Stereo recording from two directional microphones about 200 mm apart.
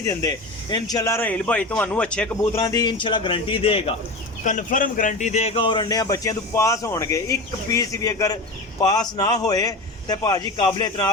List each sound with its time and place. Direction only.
0.1 s speech: 20° left (ahead or behind)
4.4 s speech: 40° left (ahead or behind); by 11.1 s 20° left (ahead or behind)